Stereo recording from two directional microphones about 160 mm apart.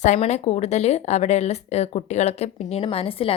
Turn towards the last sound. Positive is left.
turn(degrees=35)  # may be behind; listen again after turning